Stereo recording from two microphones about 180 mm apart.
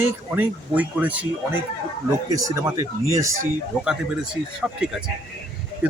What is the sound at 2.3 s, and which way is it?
Speech, 15° right (ahead or behind).